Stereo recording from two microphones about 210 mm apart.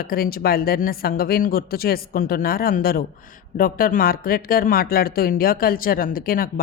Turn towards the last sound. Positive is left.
turn(degrees=45)  # may be behind; listen again after turning